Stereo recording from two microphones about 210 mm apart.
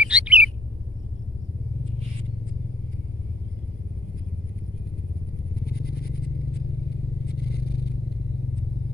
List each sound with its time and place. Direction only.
0.0 s bird: 5° right (ahead or behind)
5.7 s a sound: 50° left (ahead or behind)
7.2 s scrape: 50° left (ahead or behind)